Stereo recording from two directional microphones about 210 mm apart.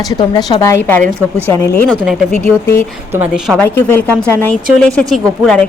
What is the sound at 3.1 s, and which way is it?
Speech, 10° right (ahead or behind).